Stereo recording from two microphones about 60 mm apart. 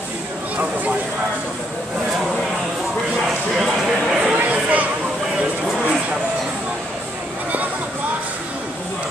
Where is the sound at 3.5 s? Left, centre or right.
Centre.